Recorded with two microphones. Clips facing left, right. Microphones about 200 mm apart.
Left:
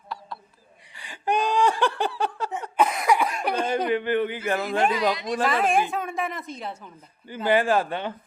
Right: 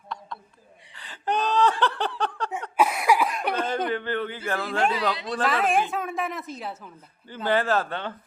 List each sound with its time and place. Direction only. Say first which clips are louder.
0.9 s laughter: left 2 dB; 10° left (ahead or behind)
2.7 s a sound: even; 5° right (ahead or behind)
3.8 s speech: left 4 dB; 15° left (ahead or behind)
5.5 s a woman's voice: even; centre (ahead or behind)
7.3 s speech: left 2 dB; 15° left (ahead or behind)